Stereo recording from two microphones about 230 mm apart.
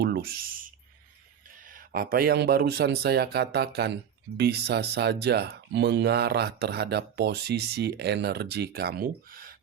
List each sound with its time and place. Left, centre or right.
0.0 s writing: right
1.5 s speech: right